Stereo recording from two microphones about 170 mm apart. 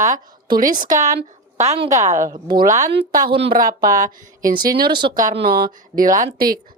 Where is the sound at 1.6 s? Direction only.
35° right (ahead or behind).